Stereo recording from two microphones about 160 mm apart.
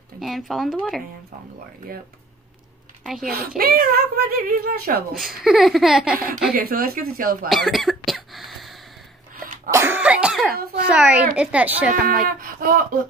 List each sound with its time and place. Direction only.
0.2 s a sound: centre (ahead or behind)
3.3 s speech: 70° right (ahead or behind)
5.1 s a sound: centre (ahead or behind)
6.5 s speech: 65° right (ahead or behind)
7.4 s speech: centre (ahead or behind)
9.7 s cough: 15° right (ahead or behind)
10.5 s speech: 70° right (ahead or behind)
10.9 s a child's voice: 5° right (ahead or behind)
12.1 s speech: 60° right (ahead or behind)